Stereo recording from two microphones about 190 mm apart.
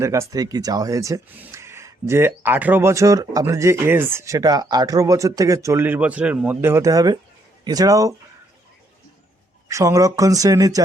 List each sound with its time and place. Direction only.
0.0 s speech: 15° right (ahead or behind)
9.6 s speech: 15° right (ahead or behind)